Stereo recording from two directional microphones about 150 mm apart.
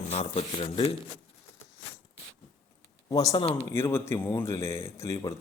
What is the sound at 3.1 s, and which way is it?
Speech, 25° left (ahead or behind).